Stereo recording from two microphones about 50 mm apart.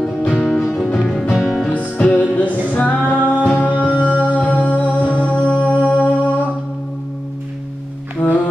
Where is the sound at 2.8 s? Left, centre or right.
Left.